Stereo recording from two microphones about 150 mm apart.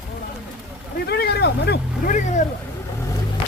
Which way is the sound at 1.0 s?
90° left.